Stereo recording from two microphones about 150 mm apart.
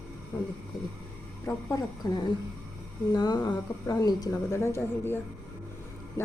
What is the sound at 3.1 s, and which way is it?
A woman's voice, 25° left (ahead or behind).